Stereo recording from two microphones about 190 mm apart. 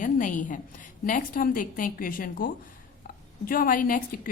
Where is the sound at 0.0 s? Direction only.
45° left (ahead or behind).